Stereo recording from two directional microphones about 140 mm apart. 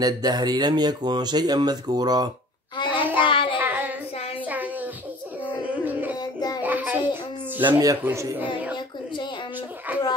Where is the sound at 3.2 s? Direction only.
40° left (ahead or behind).